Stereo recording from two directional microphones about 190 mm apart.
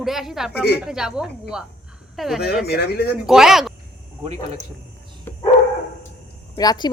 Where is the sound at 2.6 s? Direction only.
55° left (ahead or behind).